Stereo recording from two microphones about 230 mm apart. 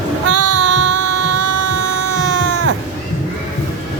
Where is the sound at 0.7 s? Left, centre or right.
Right.